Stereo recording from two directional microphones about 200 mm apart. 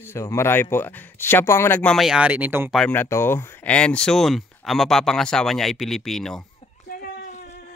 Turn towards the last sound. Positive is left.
turn(degrees=35)  # may be behind; listen again after turning